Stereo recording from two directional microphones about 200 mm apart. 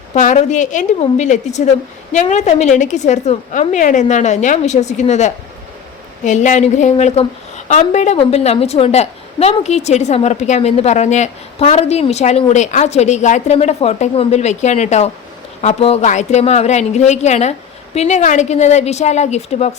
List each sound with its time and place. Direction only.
0.1 s a woman's voice: 35° left (ahead or behind)